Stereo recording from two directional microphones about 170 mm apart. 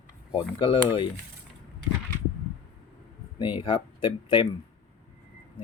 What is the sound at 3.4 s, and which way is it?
Speech, 30° left (ahead or behind).